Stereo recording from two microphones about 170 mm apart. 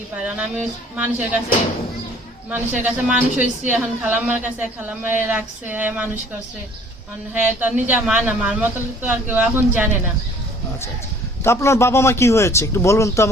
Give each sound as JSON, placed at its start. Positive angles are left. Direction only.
{"t": 0.2, "sound": "speech", "side_deg": -10}
{"t": 2.5, "sound": "speech", "side_deg": -10}
{"t": 7.3, "sound": "speech", "side_deg": -10}
{"t": 11.4, "sound": "a man's voice", "side_deg": 15}